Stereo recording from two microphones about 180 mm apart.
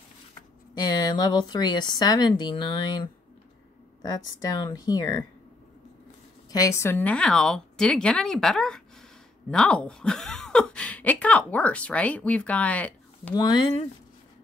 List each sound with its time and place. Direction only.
0.7 s speech: 20° left (ahead or behind)
6.5 s speech: 15° left (ahead or behind)
13.3 s speech: 25° left (ahead or behind)